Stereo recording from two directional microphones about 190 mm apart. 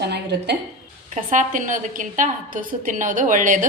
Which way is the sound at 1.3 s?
45° right (ahead or behind).